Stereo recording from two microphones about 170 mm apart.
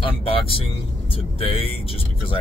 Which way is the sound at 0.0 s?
35° left (ahead or behind).